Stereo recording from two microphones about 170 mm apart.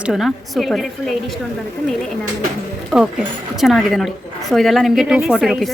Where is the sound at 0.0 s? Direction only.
Centre (ahead or behind).